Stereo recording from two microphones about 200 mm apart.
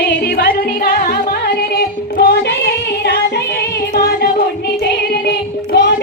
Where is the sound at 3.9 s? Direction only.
50° left (ahead or behind).